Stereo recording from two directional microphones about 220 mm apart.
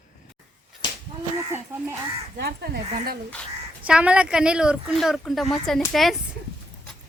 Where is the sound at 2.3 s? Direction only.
45° right (ahead or behind).